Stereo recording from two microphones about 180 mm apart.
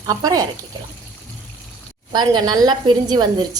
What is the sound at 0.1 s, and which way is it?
Speech, 20° right (ahead or behind).